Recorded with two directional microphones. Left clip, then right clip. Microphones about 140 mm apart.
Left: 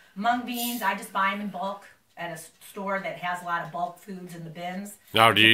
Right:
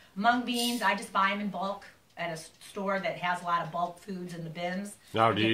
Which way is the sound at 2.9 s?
15° right (ahead or behind).